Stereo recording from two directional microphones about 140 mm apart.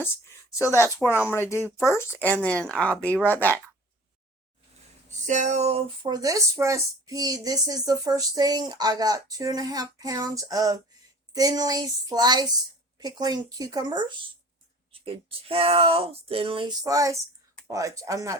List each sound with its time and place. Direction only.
0.5 s speech: 20° left (ahead or behind)
5.2 s a sound: 60° right (ahead or behind)
6.0 s a woman's voice: 30° right (ahead or behind)
14.9 s speech: 40° right (ahead or behind)
16.8 s a woman's voice: 25° right (ahead or behind)